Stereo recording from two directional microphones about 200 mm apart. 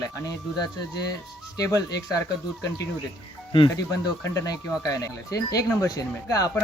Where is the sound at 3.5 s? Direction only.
20° left (ahead or behind).